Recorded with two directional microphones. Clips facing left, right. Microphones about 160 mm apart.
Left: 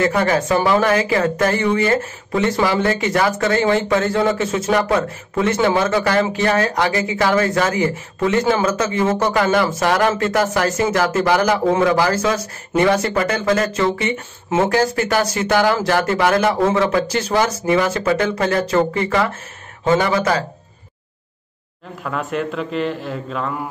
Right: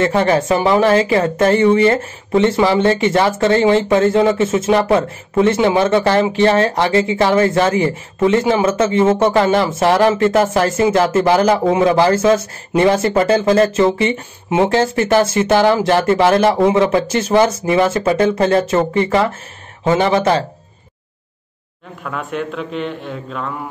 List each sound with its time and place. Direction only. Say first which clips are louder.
0.0 s speech: right 3 dB; 25° right (ahead or behind)
22.0 s a man's voice: left 1 dB; centre (ahead or behind)